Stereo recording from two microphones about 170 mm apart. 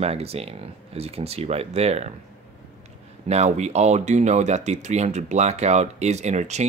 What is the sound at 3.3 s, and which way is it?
Speech, 40° right (ahead or behind).